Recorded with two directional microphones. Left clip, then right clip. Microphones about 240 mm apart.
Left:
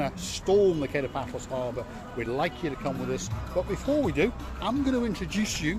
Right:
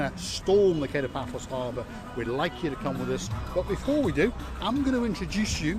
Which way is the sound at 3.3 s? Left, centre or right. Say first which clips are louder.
Right 1 dB; right.